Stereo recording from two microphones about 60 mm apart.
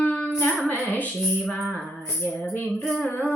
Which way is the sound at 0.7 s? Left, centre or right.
Left.